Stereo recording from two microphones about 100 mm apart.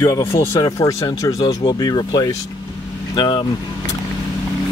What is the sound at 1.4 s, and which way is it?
Speech, 50° left (ahead or behind).